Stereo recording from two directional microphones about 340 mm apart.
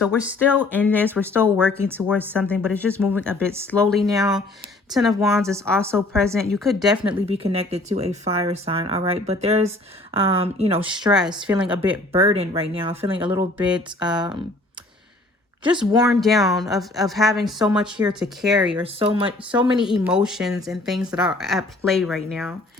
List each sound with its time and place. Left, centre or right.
0.2 s speech: centre
1.0 s speech: centre
1.7 s speech: centre
7.0 s speech: centre
13.7 s speech: centre
15.6 s speech: centre
18.8 s speech: centre
19.5 s speech: centre